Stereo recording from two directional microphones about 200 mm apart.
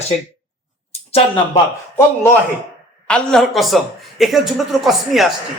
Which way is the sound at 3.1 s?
Centre (ahead or behind).